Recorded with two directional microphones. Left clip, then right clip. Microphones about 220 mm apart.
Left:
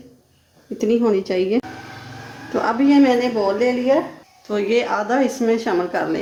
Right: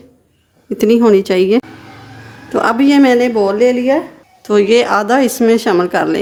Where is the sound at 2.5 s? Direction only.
45° right (ahead or behind).